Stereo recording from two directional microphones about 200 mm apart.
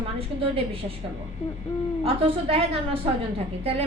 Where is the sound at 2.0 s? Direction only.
30° right (ahead or behind).